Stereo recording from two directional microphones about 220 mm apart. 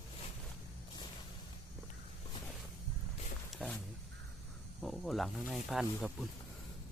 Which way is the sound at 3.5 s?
Centre (ahead or behind).